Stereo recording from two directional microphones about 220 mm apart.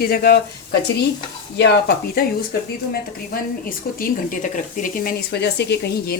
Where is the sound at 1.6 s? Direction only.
50° left (ahead or behind).